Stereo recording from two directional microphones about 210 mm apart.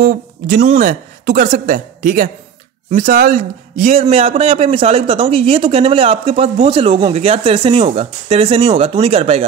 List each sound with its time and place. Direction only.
0.0 s a man's voice: 40° right (ahead or behind)